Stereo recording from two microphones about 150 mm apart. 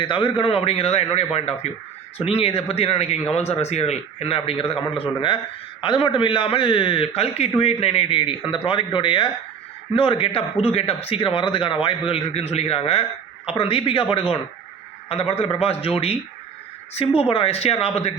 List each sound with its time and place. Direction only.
0.0 s speech: 35° left (ahead or behind)
17.2 s speech: 40° left (ahead or behind)